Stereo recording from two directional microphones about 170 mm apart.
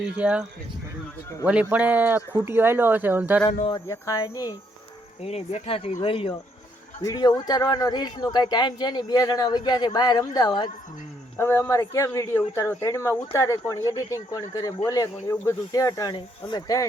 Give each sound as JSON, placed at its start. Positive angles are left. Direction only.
{"t": 0.2, "sound": "speech", "side_deg": -5}
{"t": 1.7, "sound": "speech", "side_deg": -10}
{"t": 3.7, "sound": "speech", "side_deg": 20}
{"t": 5.2, "sound": "speech", "side_deg": 40}
{"t": 11.3, "sound": "speech", "side_deg": 15}